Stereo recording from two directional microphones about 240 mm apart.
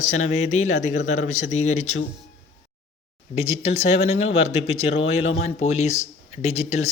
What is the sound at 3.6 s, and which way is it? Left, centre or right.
Speech, left.